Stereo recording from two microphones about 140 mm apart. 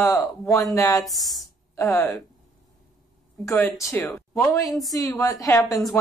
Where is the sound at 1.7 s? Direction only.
20° left (ahead or behind).